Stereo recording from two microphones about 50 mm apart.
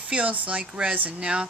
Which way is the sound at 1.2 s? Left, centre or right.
Centre.